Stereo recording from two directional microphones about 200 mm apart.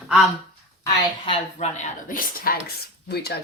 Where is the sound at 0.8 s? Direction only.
20° left (ahead or behind).